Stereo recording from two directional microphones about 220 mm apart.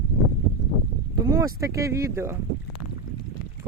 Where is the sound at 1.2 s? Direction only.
15° right (ahead or behind).